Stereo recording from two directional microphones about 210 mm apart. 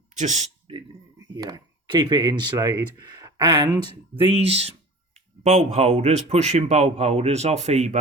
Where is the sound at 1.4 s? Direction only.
20° right (ahead or behind).